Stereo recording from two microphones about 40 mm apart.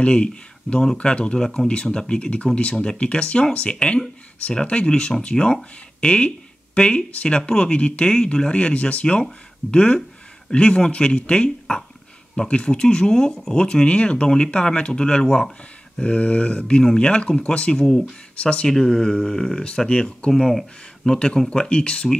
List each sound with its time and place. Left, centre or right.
0.0 s speech: left
15.2 s speech: centre
16.0 s speech: left
18.7 s speech: centre
19.9 s speech: left
20.2 s speech: centre
21.1 s speech: left